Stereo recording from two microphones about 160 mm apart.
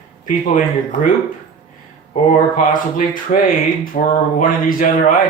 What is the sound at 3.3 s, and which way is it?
Speech, 50° left (ahead or behind).